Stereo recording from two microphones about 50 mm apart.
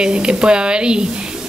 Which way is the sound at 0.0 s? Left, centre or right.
Centre.